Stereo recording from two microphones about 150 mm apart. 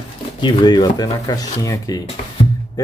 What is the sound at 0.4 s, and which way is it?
Speech, 30° left (ahead or behind).